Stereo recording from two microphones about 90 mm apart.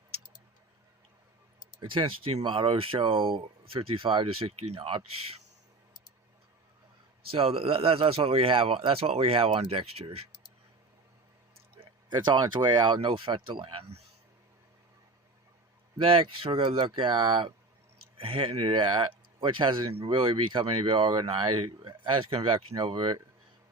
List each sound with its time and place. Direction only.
1.8 s speech: 70° right (ahead or behind)
7.3 s speech: 90° right
11.8 s speech: 60° right (ahead or behind)
16.0 s speech: 80° right; by 17.5 s 65° right (ahead or behind)
18.2 s speech: 90° right; by 23.1 s 65° right (ahead or behind)